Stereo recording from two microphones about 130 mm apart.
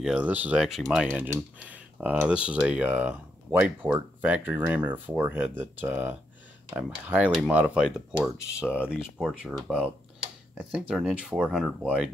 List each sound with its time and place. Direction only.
0.0 s speech: 10° right (ahead or behind)
1.0 s speech: 10° right (ahead or behind)